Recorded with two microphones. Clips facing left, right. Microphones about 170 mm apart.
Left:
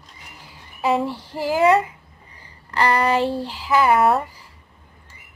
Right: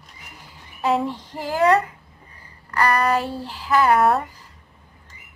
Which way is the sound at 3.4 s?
10° left (ahead or behind).